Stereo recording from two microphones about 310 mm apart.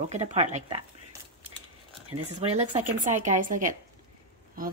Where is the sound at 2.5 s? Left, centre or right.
Centre.